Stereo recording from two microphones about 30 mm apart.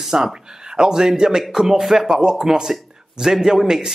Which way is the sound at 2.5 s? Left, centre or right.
Centre.